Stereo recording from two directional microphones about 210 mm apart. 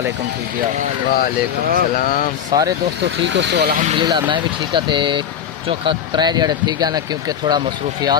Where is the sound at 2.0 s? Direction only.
40° left (ahead or behind).